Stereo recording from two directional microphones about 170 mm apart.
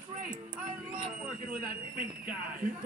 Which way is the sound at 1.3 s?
55° right (ahead or behind).